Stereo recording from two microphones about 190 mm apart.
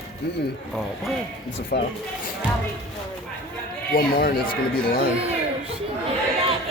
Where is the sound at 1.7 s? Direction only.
50° left (ahead or behind).